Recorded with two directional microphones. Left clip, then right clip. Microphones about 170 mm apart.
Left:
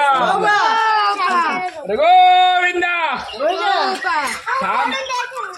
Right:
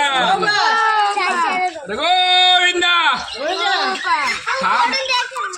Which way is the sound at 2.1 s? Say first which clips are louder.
Left 1 dB; 70° right (ahead or behind).